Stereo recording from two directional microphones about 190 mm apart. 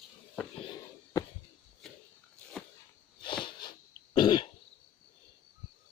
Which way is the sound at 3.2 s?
25° left (ahead or behind).